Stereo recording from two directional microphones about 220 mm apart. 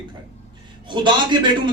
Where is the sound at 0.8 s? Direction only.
20° right (ahead or behind).